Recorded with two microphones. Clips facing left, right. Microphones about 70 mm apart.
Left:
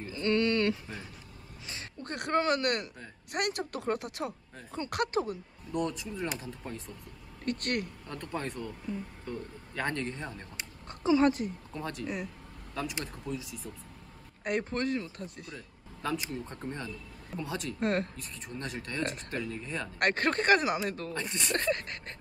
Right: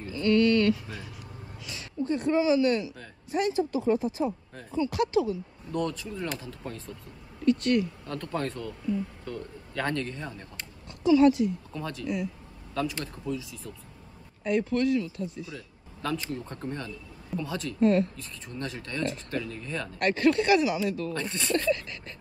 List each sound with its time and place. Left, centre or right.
0.0 s a sound: left
2.0 s speech: left
4.7 s speech: left
5.7 s a man's voice: centre
7.4 s speech: left
8.1 s a man's voice: centre
10.9 s speech: left
14.6 s speech: left
16.0 s speech: centre
17.7 s speech: left
18.1 s speech: left
20.0 s speech: left
21.1 s speech: centre
21.5 s speech: left